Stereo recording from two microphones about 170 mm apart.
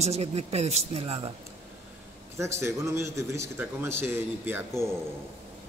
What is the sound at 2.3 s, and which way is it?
A man's voice, 15° right (ahead or behind).